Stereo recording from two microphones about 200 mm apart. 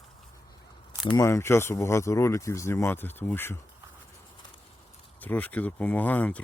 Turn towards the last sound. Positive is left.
turn(degrees=5)  # may be behind; listen again after turning